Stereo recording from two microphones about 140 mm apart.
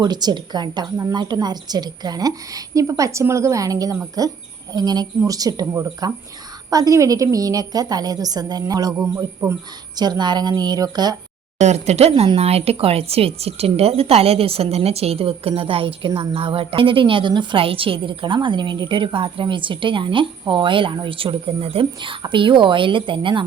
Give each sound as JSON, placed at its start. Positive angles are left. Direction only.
{"t": 0.0, "sound": "a woman's voice", "side_deg": -30}
{"t": 10.0, "sound": "a woman's voice", "side_deg": -30}
{"t": 11.6, "sound": "a woman's voice", "side_deg": -50}